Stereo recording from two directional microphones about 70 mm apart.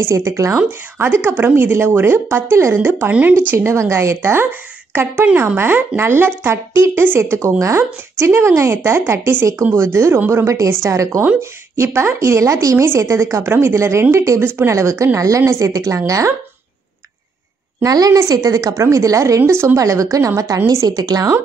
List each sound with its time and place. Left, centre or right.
0.1 s a woman's voice: right
0.7 s a woman's voice: right
3.1 s speech: right
3.5 s a woman's voice: right
11.2 s a woman's voice: right
12.8 s a woman's voice: right
14.4 s a woman's voice: right
17.8 s a woman's voice: right
19.8 s a woman's voice: right